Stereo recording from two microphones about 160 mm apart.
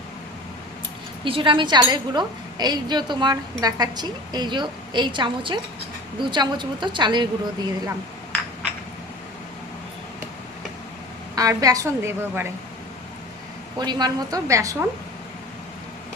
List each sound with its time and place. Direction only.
1.2 s a woman's voice: 30° right (ahead or behind)
11.3 s a woman's voice: 20° right (ahead or behind)
13.7 s a woman's voice: 25° right (ahead or behind)